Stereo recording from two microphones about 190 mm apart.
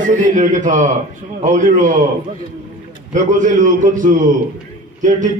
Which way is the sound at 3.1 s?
40° right (ahead or behind).